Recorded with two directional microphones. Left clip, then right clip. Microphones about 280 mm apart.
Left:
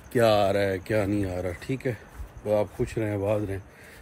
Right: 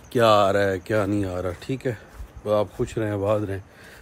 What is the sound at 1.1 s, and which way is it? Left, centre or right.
Speech, centre.